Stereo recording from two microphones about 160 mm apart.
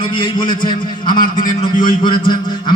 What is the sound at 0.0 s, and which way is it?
Speech, 30° left (ahead or behind).